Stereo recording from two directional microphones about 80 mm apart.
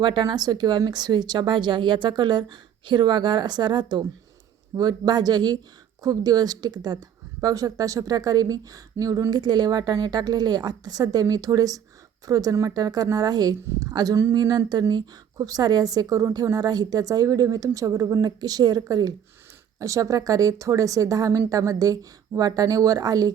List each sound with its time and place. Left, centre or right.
0.0 s speech: right
4.7 s a woman's voice: right
19.8 s a woman's voice: right